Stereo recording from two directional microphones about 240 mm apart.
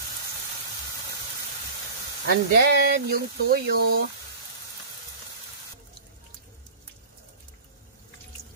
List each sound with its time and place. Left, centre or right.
2.2 s speech: right